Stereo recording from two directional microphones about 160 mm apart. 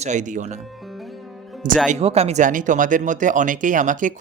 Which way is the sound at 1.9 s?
40° right (ahead or behind).